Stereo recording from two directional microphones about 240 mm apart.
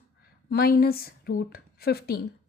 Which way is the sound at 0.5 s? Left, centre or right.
Left.